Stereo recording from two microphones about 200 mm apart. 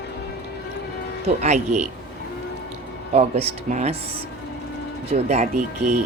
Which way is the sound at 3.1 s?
30° right (ahead or behind).